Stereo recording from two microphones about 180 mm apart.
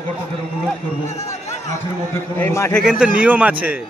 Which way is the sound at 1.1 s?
40° left (ahead or behind).